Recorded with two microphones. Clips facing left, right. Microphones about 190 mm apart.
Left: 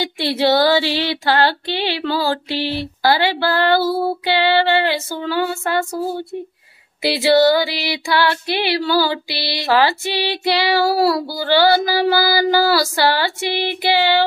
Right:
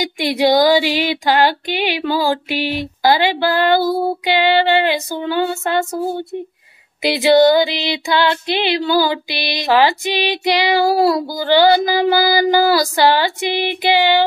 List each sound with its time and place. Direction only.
0.0 s female singing: 15° right (ahead or behind)
7.0 s female singing: 20° right (ahead or behind)